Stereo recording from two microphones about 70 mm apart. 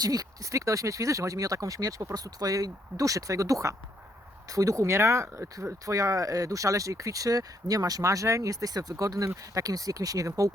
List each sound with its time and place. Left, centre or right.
0.0 s speech: right